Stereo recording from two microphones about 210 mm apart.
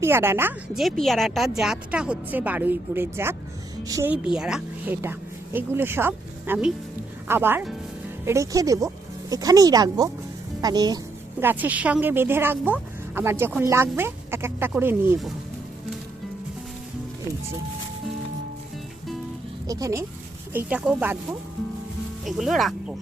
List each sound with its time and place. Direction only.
0.0 s a woman's voice: 10° right (ahead or behind)
19.6 s a woman's voice: 15° right (ahead or behind)
22.2 s speech: centre (ahead or behind)